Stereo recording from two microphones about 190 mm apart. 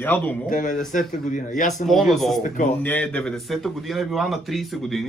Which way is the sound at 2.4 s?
45° left (ahead or behind).